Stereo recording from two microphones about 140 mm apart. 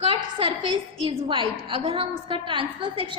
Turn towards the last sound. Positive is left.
turn(degrees=-40)  # may be behind; listen again after turning